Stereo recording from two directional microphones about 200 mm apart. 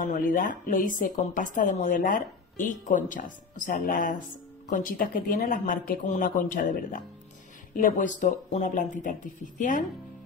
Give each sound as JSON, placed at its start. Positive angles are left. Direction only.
{"t": 0.0, "sound": "a woman's voice", "side_deg": 40}